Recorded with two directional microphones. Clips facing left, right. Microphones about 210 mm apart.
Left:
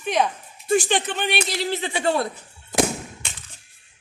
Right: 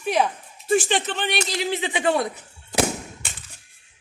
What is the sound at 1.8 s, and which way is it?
Speech, 15° right (ahead or behind).